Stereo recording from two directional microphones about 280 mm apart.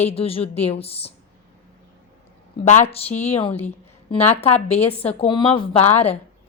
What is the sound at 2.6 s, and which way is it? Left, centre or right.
A woman's voice, left.